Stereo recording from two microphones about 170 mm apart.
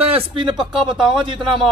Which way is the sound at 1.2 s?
30° right (ahead or behind).